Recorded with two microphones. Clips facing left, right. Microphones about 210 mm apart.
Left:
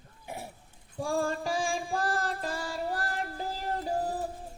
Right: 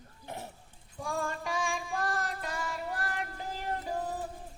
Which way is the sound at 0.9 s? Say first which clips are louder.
Left 5 dB; 30° left (ahead or behind).